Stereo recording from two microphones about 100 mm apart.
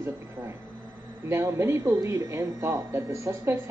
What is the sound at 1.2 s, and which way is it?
Speech, 25° right (ahead or behind).